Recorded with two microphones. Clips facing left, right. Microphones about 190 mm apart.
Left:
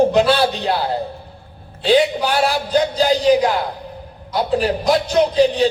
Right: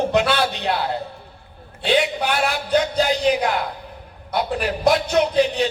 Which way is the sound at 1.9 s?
35° left (ahead or behind).